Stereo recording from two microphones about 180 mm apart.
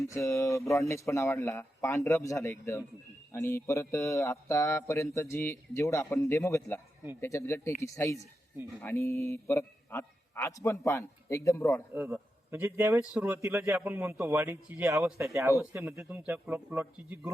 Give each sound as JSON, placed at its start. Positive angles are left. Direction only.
{"t": 0.1, "sound": "speech", "side_deg": 15}
{"t": 11.9, "sound": "speech", "side_deg": -10}